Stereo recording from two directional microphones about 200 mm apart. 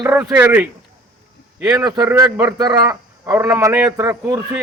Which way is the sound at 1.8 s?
15° right (ahead or behind).